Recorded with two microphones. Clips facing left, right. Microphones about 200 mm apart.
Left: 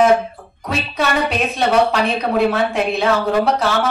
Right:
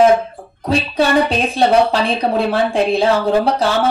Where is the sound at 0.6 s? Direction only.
30° right (ahead or behind).